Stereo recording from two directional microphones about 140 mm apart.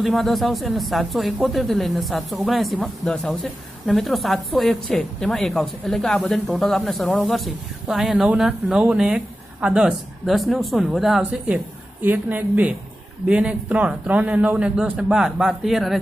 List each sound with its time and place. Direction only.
0.0 s a woman's voice: centre (ahead or behind)